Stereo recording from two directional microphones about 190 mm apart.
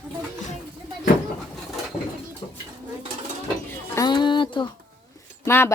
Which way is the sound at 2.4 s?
15° left (ahead or behind).